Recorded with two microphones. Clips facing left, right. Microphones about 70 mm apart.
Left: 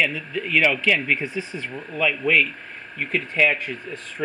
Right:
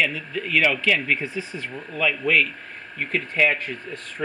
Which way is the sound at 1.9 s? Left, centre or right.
Centre.